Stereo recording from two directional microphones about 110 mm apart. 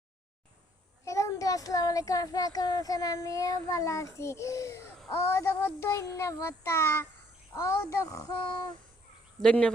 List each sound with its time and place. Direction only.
1.0 s a child's voice: 30° left (ahead or behind)
5.1 s child singing: 25° left (ahead or behind)
9.4 s speech: 10° left (ahead or behind)